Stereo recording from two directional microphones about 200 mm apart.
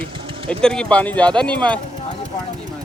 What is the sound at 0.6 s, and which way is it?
Speech, 5° left (ahead or behind).